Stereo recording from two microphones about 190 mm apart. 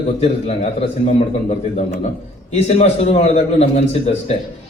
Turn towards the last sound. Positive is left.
turn(degrees=35)  # may be behind; listen again after turning